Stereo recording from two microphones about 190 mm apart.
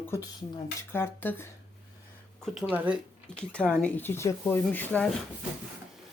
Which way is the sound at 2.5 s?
5° right (ahead or behind).